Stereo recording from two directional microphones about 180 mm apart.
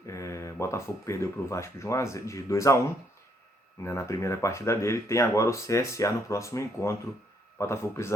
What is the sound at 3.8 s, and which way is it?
Speech, 15° left (ahead or behind).